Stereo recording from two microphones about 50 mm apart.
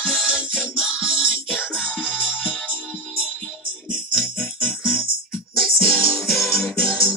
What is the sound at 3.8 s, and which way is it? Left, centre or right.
Music, centre.